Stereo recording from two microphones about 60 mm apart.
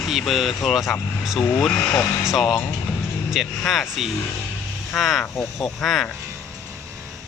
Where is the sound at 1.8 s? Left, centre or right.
Left.